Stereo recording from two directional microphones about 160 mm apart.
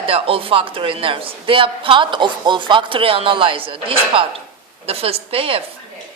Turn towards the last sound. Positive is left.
turn(degrees=-35)  # may be behind; listen again after turning